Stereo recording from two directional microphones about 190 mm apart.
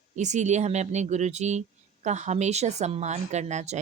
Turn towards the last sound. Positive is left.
turn(degrees=-35)  # may be behind; listen again after turning